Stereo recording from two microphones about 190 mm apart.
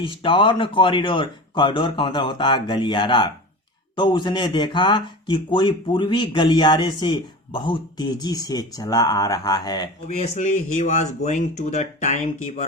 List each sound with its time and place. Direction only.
0.0 s a man's voice: 25° left (ahead or behind)
10.2 s speech: 35° left (ahead or behind)